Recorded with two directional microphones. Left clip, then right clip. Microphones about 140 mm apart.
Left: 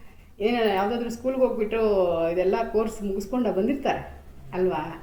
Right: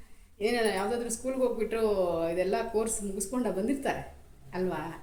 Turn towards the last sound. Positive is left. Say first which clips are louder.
# left 8 dB
turn(degrees=-25)  # may be behind; listen again after turning